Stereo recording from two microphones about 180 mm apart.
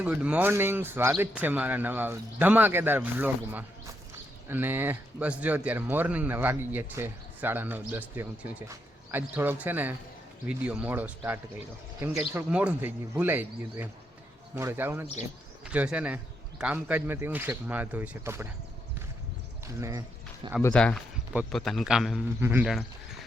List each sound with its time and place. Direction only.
0.0 s speech: 10° right (ahead or behind)
19.6 s speech: 15° right (ahead or behind)
20.7 s a man's voice: 5° left (ahead or behind); by 22.6 s 10° right (ahead or behind)
22.6 s a man's voice: centre (ahead or behind)